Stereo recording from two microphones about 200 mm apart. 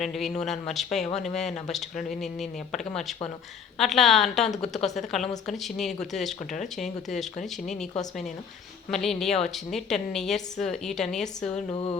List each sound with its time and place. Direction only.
0.0 s a woman's voice: centre (ahead or behind)
8.9 s a woman's voice: centre (ahead or behind)
11.7 s music: 25° left (ahead or behind)